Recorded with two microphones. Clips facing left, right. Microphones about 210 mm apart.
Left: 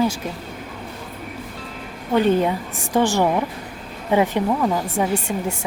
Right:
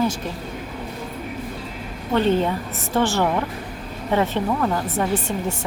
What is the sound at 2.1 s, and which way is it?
Speech, 10° left (ahead or behind).